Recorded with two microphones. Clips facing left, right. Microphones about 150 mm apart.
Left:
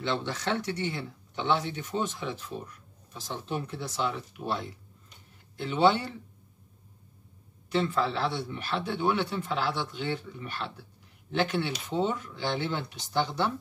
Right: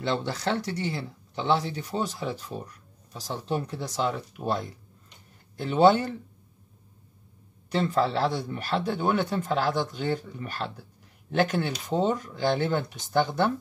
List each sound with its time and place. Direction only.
0.0 s a man's voice: 40° right (ahead or behind)
7.7 s a man's voice: 40° right (ahead or behind)